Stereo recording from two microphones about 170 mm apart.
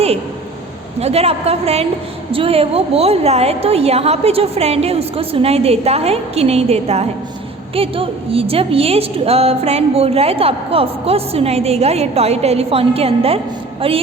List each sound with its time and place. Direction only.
0.9 s a woman's voice: 40° right (ahead or behind)